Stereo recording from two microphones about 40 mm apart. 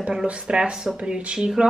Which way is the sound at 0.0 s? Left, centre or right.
Right.